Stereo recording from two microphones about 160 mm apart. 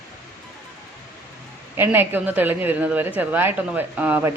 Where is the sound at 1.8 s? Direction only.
10° right (ahead or behind).